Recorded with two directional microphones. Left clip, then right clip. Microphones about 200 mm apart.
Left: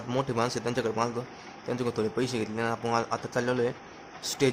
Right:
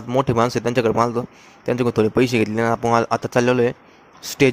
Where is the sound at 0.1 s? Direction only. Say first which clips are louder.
Right 10 dB; 35° right (ahead or behind).